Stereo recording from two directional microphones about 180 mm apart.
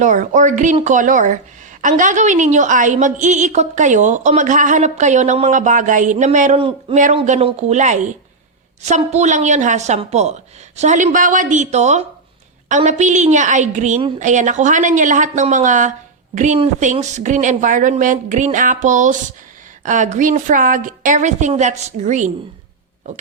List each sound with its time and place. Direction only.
0.0 s a woman's voice: 45° right (ahead or behind)